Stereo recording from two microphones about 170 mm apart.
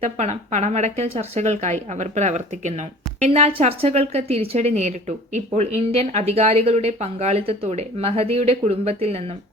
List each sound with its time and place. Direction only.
0.0 s a woman's voice: 40° right (ahead or behind)